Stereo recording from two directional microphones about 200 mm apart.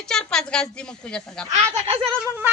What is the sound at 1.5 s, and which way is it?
Speech, 35° right (ahead or behind).